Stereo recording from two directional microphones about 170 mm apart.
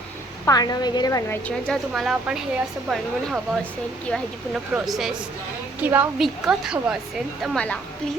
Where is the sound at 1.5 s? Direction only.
5° left (ahead or behind).